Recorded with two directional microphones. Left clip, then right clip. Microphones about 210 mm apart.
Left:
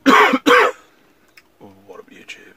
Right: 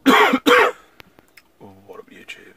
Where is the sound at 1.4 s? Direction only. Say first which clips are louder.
Left 1 dB; 10° right (ahead or behind).